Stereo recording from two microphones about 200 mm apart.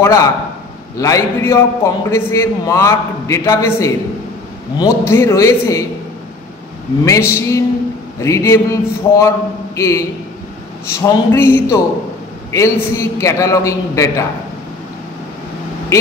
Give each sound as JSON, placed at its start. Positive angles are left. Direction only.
{"t": 0.0, "sound": "a man's voice", "side_deg": 15}
{"t": 7.1, "sound": "a man's voice", "side_deg": 15}